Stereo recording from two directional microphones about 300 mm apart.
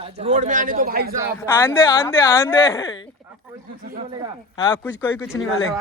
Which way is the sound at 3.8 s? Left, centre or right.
Right.